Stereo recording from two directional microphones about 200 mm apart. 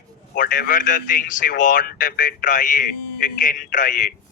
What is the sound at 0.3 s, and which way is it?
A man's voice, 45° left (ahead or behind).